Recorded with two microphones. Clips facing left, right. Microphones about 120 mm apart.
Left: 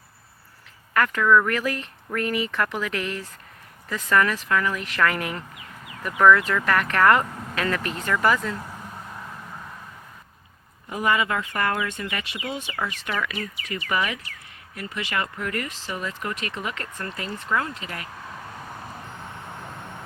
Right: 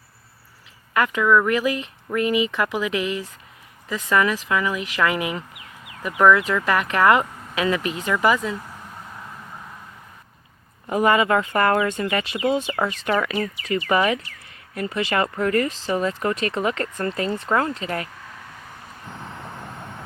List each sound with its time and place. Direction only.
0.9 s speech: 10° right (ahead or behind)
10.8 s speech: 45° right (ahead or behind)